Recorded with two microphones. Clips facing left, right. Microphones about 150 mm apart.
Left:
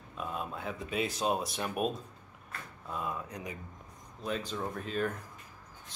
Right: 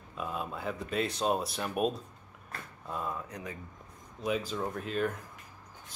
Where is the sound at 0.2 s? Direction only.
Centre (ahead or behind).